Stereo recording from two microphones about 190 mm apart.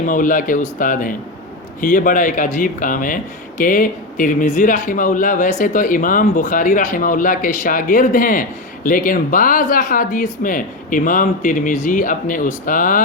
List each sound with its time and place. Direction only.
0.0 s speech: 45° left (ahead or behind)